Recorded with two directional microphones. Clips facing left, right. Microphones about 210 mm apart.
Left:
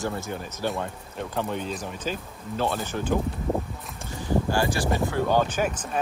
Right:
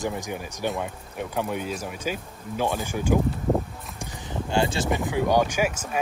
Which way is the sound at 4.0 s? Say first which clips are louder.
Left 1 dB; 15° right (ahead or behind).